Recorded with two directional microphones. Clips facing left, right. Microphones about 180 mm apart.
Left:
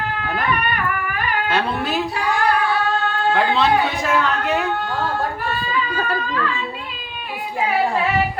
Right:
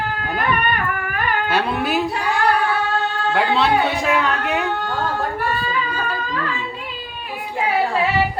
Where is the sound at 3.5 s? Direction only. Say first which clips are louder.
Even; centre (ahead or behind).